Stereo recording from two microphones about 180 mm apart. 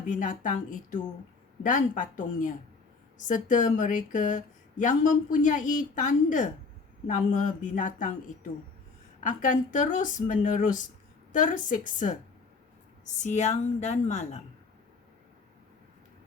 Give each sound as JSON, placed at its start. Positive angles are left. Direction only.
{"t": 0.0, "sound": "speech", "side_deg": 45}
{"t": 9.2, "sound": "a woman's voice", "side_deg": 45}